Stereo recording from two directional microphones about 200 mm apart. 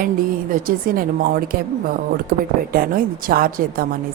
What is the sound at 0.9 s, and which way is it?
A woman's voice, 45° right (ahead or behind).